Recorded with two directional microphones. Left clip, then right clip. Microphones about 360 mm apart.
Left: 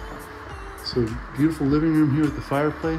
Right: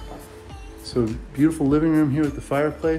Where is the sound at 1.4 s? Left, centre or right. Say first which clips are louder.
Right 2 dB; centre.